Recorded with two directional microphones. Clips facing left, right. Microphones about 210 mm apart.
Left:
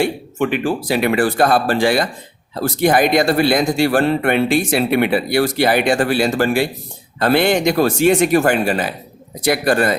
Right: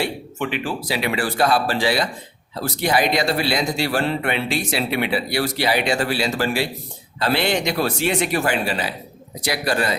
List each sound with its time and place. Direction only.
0.0 s speech: 50° left (ahead or behind)